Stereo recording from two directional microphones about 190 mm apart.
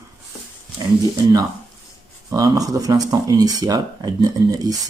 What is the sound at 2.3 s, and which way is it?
Speech, 20° right (ahead or behind).